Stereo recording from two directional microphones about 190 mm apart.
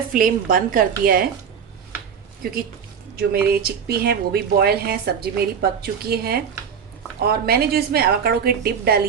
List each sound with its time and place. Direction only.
0.1 s a woman's voice: 45° right (ahead or behind)
3.2 s speech: 55° right (ahead or behind)